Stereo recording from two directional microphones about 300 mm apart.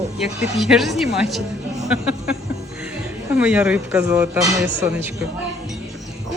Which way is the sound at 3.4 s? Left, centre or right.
Centre.